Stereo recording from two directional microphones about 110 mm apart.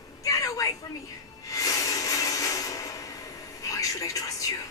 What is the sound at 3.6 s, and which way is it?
Television, 30° left (ahead or behind).